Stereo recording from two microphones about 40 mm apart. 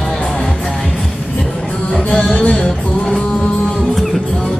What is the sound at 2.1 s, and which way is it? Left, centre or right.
Music, left.